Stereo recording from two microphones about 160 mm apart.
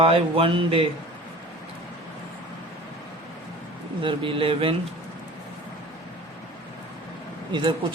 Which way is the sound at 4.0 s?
35° right (ahead or behind).